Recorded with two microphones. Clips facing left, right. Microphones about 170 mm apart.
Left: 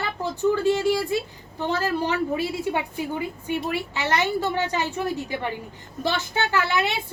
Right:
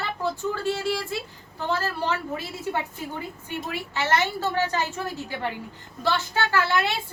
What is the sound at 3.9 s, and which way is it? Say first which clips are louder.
A woman's voice: right 1 dB; 15° left (ahead or behind).